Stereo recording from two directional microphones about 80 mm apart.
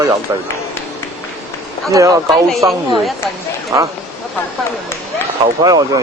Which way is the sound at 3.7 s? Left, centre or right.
Right.